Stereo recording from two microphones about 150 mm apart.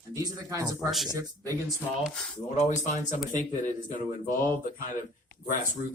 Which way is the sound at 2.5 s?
50° left (ahead or behind).